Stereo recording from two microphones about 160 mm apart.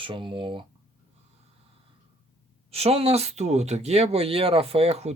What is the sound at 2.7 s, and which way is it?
Speech, 40° right (ahead or behind).